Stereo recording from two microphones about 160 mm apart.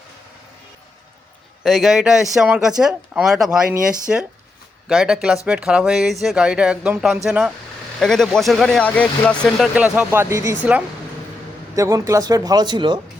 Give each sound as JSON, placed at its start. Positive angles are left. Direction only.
{"t": 1.6, "sound": "speech", "side_deg": 0}
{"t": 9.7, "sound": "speech", "side_deg": -5}
{"t": 11.7, "sound": "a man's voice", "side_deg": -20}